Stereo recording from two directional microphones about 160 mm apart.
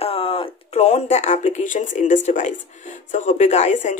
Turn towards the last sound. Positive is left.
turn(degrees=50)  # may be behind; listen again after turning